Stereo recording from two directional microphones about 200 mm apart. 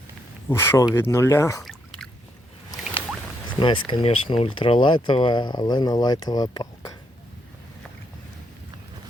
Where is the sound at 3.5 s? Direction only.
25° left (ahead or behind).